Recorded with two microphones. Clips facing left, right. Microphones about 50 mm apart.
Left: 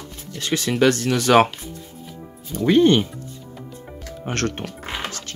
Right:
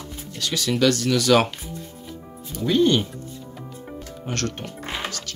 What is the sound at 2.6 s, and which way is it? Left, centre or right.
Speech, left.